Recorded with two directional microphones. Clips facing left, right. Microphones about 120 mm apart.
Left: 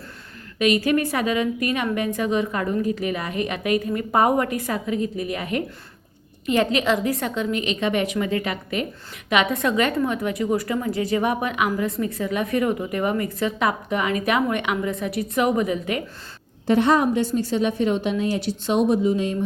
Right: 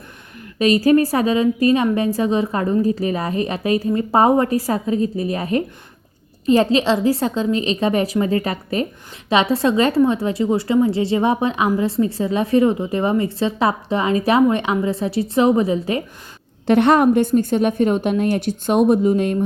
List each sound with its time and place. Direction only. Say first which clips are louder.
0.6 s a woman's voice: right 6 dB; 35° right (ahead or behind)
16.6 s a woman's voice: right 5 dB; 65° right (ahead or behind)